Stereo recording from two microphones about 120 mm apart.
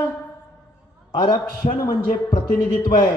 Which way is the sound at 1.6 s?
60° left (ahead or behind).